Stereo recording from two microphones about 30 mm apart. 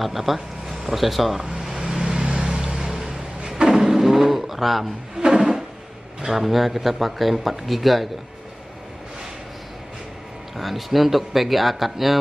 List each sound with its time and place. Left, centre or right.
0.0 s speech: centre
2.0 s vehicle: right
2.7 s vehicle: centre
3.6 s a sound: centre
5.1 s a sound: centre
6.3 s speech: centre
10.6 s speech: centre